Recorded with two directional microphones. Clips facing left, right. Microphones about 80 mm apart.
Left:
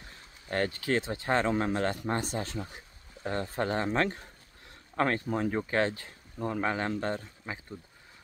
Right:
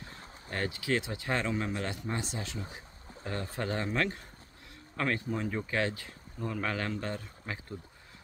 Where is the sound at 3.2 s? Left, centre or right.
Right.